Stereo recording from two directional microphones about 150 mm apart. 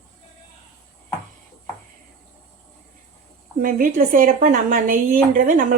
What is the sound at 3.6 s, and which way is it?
Speech, 65° right (ahead or behind).